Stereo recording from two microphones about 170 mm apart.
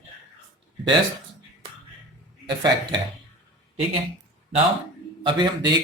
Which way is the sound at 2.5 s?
25° right (ahead or behind).